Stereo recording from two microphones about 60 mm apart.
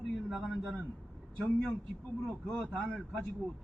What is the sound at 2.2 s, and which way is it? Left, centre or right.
Speech, centre.